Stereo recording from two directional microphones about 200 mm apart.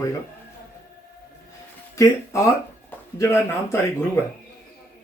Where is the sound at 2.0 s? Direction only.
15° left (ahead or behind).